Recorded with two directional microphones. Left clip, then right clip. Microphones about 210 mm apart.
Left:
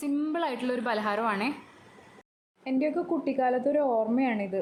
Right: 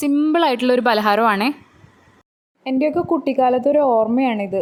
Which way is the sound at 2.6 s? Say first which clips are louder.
Right 10 dB; 35° right (ahead or behind).